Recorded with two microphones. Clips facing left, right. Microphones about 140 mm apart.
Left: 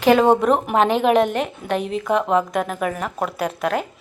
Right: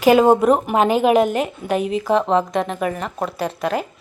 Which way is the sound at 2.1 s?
30° right (ahead or behind).